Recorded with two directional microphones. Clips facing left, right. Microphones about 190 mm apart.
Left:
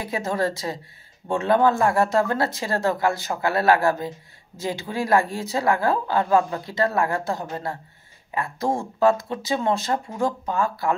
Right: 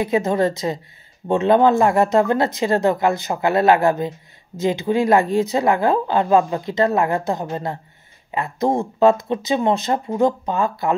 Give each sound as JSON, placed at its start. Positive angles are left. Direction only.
{"t": 0.0, "sound": "a woman's voice", "side_deg": -20}